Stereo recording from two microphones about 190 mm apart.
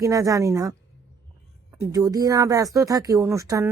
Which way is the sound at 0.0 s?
15° right (ahead or behind).